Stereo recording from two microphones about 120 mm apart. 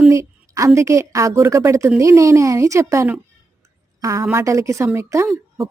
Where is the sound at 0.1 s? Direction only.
25° right (ahead or behind).